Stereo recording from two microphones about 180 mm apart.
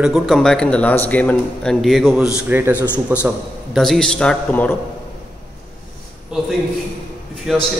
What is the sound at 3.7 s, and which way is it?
A man's voice, centre (ahead or behind).